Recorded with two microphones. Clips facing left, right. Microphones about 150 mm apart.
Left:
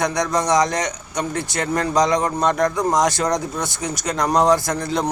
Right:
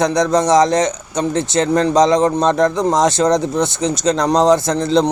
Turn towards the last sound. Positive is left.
turn(degrees=-25)  # may be behind; listen again after turning